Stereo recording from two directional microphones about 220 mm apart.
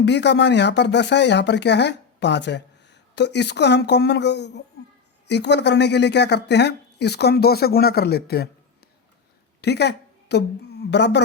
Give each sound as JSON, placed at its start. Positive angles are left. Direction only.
{"t": 0.0, "sound": "speech", "side_deg": 50}
{"t": 9.6, "sound": "a sound", "side_deg": 50}
{"t": 10.9, "sound": "speech", "side_deg": 50}